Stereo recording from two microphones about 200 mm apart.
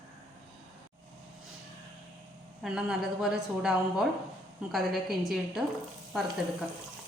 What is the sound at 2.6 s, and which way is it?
A woman's voice, 5° right (ahead or behind).